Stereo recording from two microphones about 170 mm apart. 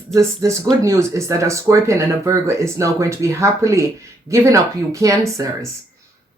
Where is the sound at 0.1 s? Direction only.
15° right (ahead or behind).